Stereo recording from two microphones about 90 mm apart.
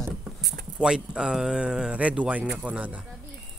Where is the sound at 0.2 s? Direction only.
5° right (ahead or behind).